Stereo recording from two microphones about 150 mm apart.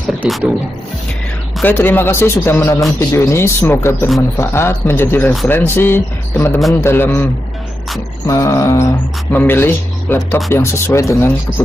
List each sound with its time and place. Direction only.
0.2 s speech: 5° right (ahead or behind)
1.6 s speech: 15° left (ahead or behind)
8.3 s speech: 20° left (ahead or behind)